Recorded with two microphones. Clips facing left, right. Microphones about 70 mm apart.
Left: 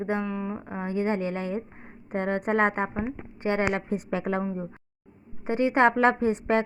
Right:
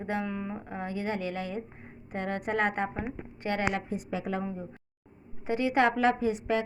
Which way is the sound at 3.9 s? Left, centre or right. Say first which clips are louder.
Left 5 dB; left.